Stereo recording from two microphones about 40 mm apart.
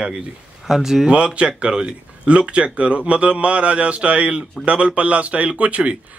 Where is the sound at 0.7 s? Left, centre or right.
Centre.